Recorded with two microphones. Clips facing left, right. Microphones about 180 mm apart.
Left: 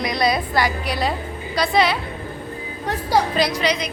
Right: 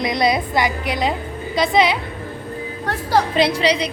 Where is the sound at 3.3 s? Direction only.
30° right (ahead or behind).